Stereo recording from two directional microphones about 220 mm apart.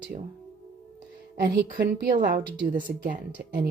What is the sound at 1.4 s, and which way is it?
Speech, 40° right (ahead or behind).